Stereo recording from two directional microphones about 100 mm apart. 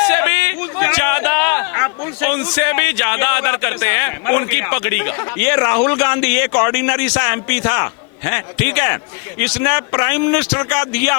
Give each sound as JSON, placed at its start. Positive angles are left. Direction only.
{"t": 0.0, "sound": "speech", "side_deg": 25}